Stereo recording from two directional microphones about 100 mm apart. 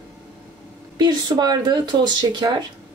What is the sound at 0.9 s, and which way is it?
Speech, 45° right (ahead or behind).